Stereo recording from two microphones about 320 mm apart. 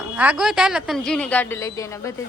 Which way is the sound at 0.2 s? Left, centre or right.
Centre.